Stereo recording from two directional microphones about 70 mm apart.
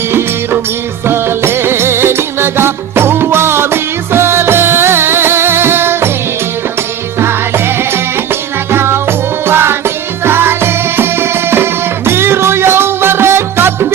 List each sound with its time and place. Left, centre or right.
0.1 s music: right
7.2 s music: right